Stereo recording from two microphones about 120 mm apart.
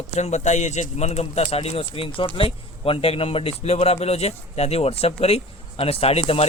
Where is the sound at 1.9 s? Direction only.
45° left (ahead or behind).